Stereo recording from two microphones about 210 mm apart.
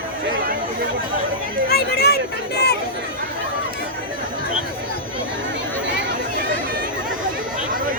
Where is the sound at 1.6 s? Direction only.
50° left (ahead or behind).